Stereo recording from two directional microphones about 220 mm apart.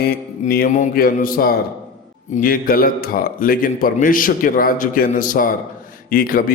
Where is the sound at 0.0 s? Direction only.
40° left (ahead or behind).